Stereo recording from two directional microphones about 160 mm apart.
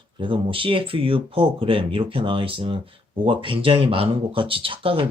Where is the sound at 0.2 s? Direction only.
30° right (ahead or behind).